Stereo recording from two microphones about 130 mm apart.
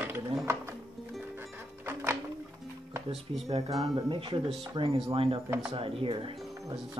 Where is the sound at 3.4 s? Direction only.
50° right (ahead or behind).